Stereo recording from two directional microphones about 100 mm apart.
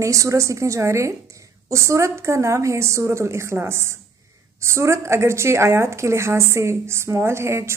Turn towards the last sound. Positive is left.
turn(degrees=-25)  # may be behind; listen again after turning